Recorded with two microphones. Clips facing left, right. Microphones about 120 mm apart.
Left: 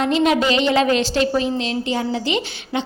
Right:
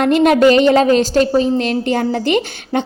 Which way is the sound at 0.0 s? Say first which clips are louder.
Right 7 dB; 50° right (ahead or behind).